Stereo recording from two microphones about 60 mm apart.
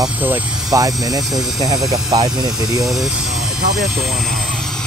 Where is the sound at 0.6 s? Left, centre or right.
Right.